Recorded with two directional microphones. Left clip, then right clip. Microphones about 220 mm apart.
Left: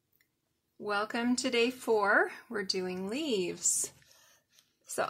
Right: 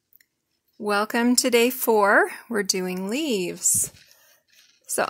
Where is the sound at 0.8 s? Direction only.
45° right (ahead or behind).